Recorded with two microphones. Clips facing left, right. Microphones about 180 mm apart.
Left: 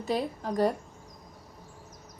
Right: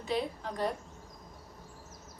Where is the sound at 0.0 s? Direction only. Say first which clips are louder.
Left 3 dB; 40° left (ahead or behind).